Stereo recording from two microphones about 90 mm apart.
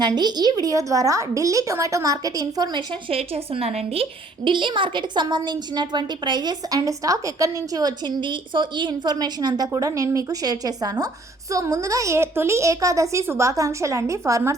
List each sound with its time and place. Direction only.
0.0 s a woman's voice: 50° right (ahead or behind)
2.7 s a woman's voice: 90° right
4.4 s a woman's voice: 65° right (ahead or behind); by 14.5 s 35° right (ahead or behind)